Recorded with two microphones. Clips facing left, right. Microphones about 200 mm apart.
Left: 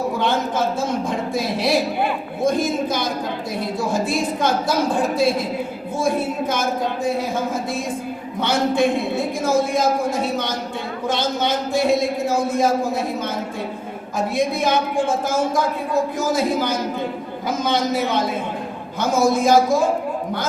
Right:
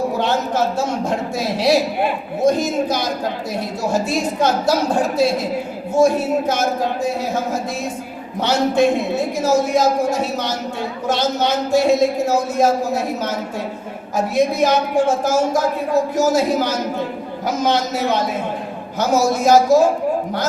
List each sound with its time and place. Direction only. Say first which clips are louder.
0.2 s speech: right 2 dB; 55° left (ahead or behind)